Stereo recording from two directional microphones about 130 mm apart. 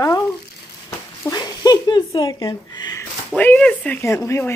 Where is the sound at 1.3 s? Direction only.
30° left (ahead or behind).